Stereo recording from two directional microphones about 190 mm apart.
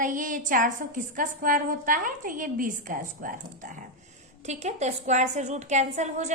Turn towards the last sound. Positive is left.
turn(degrees=-40)  # may be behind; listen again after turning